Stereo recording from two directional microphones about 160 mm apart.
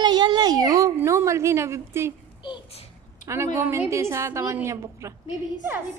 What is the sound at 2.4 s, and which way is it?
Speech, 30° left (ahead or behind).